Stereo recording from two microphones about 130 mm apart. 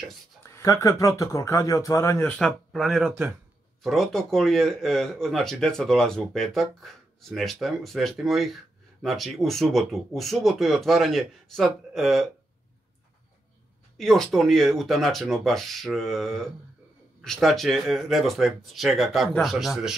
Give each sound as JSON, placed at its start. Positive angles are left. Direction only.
{"t": 0.6, "sound": "speech", "side_deg": 20}
{"t": 2.3, "sound": "speech", "side_deg": 0}
{"t": 13.9, "sound": "speech", "side_deg": 5}